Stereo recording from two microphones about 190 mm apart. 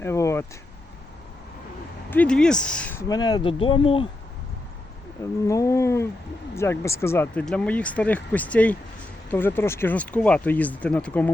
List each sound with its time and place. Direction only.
0.0 s speech: 15° left (ahead or behind)
2.0 s speech: 5° left (ahead or behind); by 4.1 s 25° left (ahead or behind)
5.2 s speech: 15° left (ahead or behind)